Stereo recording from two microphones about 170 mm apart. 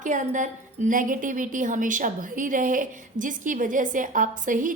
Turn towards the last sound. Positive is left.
turn(degrees=-50)  # may be behind; listen again after turning